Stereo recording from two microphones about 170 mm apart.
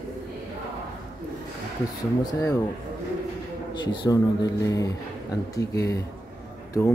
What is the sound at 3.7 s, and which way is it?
A man's voice, 25° left (ahead or behind).